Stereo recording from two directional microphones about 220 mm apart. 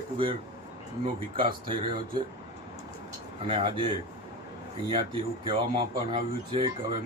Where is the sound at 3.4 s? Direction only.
25° right (ahead or behind).